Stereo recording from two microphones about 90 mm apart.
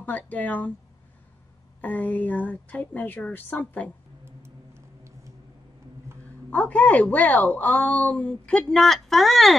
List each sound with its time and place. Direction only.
0.0 s a woman's voice: 15° left (ahead or behind)
1.8 s a woman's voice: 20° left (ahead or behind)
6.5 s a woman's voice: 15° left (ahead or behind)